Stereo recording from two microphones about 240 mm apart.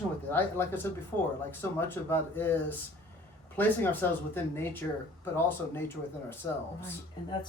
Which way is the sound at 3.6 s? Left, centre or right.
Centre.